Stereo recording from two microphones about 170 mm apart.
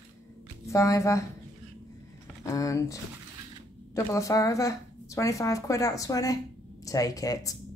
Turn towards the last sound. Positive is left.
turn(degrees=20)  # may be behind; listen again after turning